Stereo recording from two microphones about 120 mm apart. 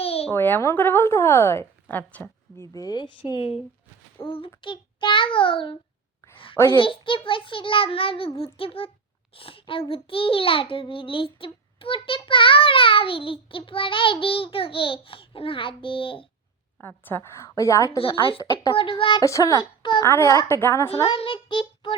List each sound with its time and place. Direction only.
0.0 s a sound: 55° left (ahead or behind)
0.3 s a woman's voice: 15° left (ahead or behind)
2.7 s a child's voice: 35° left (ahead or behind)
6.7 s a child's voice: 45° left (ahead or behind)
16.8 s a woman's voice: 15° left (ahead or behind)
17.9 s a child's voice: 50° left (ahead or behind)
19.2 s a woman's voice: 25° left (ahead or behind)
21.1 s child singing: 45° left (ahead or behind)